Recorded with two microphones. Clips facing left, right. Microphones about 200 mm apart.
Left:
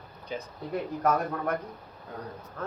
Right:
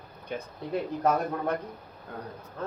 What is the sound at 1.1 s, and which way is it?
Speech, 20° right (ahead or behind).